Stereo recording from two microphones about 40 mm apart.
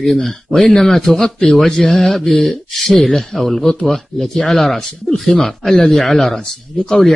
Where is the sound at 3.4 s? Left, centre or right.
Centre.